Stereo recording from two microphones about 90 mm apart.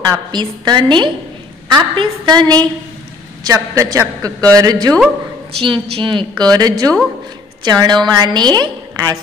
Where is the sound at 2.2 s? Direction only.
50° right (ahead or behind).